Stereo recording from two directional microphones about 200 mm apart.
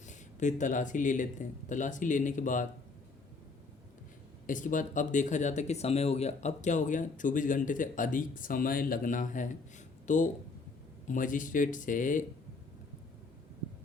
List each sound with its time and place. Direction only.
0.0 s speech: 35° left (ahead or behind)
4.4 s speech: 40° left (ahead or behind)